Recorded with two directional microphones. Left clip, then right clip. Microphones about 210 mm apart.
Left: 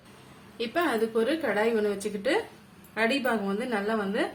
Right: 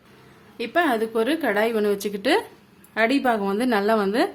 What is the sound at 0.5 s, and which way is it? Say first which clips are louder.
A woman's voice: right 6 dB; 35° right (ahead or behind).